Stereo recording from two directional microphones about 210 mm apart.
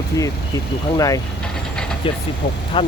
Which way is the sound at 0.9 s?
15° left (ahead or behind).